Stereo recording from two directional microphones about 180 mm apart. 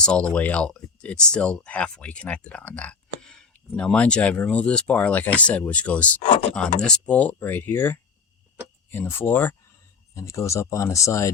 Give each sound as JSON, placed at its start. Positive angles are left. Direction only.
{"t": 0.0, "sound": "speech", "side_deg": 5}